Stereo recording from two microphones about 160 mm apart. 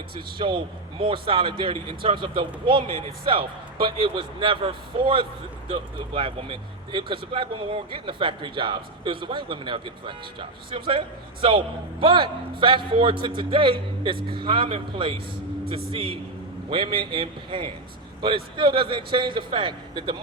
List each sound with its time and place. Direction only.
0.3 s speech: 30° right (ahead or behind)